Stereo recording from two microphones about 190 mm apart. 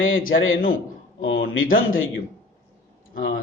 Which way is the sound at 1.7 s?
90° left.